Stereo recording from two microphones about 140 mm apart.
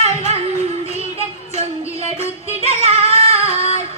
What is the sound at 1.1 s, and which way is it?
Child singing, 50° right (ahead or behind).